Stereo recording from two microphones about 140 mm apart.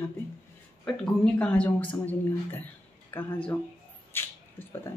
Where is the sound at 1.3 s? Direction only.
10° left (ahead or behind).